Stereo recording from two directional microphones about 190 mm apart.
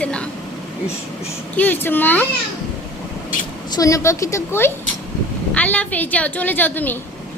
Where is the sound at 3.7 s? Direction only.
20° left (ahead or behind).